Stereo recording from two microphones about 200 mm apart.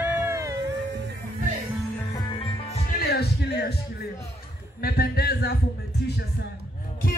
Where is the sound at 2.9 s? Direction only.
50° left (ahead or behind).